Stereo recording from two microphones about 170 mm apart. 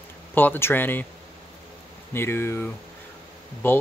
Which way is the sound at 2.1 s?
15° left (ahead or behind).